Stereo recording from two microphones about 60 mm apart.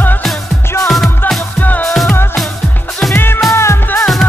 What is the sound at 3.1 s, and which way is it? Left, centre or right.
Music, left.